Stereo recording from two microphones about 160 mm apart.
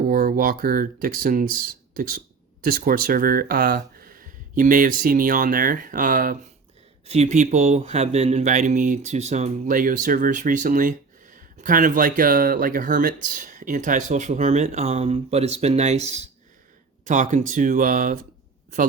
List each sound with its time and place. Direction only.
0.1 s speech: 60° right (ahead or behind)
7.1 s speech: 45° right (ahead or behind)